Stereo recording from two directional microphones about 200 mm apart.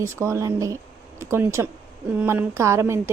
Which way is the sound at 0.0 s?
15° right (ahead or behind).